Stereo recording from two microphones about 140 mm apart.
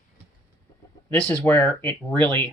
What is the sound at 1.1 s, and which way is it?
Speech, 10° left (ahead or behind).